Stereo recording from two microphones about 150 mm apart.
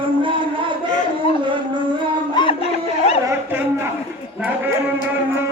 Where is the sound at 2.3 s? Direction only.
35° left (ahead or behind).